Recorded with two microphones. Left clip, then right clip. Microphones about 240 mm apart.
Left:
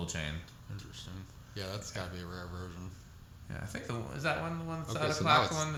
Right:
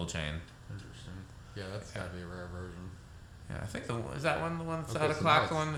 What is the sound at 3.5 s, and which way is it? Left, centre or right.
Speech, centre.